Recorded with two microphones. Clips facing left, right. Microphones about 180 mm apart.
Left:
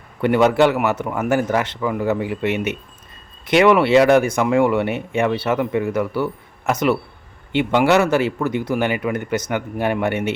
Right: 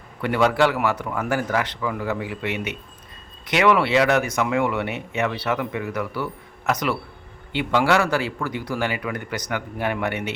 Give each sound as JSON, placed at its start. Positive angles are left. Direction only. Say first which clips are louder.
{"t": 0.2, "sound": "speech", "louder": "left 5 dB", "side_deg": 25}